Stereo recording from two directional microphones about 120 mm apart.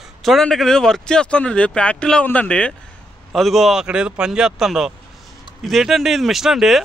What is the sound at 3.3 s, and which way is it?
A man's voice, centre (ahead or behind).